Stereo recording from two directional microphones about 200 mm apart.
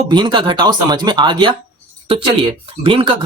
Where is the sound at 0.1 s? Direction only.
25° right (ahead or behind).